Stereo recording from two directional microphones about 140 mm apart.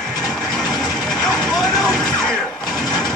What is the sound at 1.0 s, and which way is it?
Vehicle, 5° left (ahead or behind).